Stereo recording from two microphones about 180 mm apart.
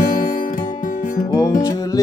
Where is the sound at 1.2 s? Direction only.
20° left (ahead or behind).